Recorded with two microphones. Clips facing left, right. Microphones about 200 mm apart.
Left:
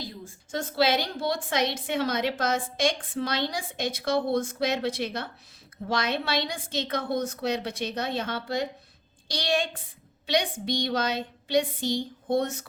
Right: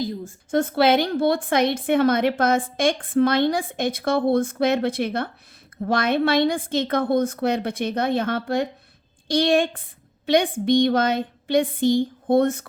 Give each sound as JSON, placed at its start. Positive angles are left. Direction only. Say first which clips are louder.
{"t": 0.5, "sound": "a woman's voice", "louder": "right 7 dB", "side_deg": -55}